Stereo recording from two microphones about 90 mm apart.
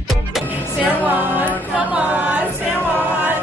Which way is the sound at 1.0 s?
20° right (ahead or behind).